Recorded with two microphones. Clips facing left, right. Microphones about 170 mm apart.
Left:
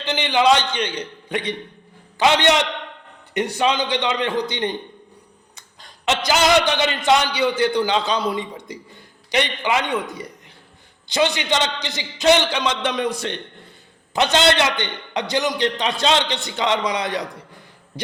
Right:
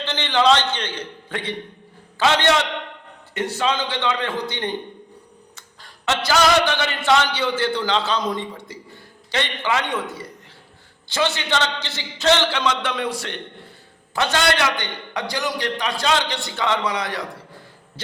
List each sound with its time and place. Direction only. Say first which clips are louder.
0.0 s a man's voice: left 1 dB; 15° left (ahead or behind)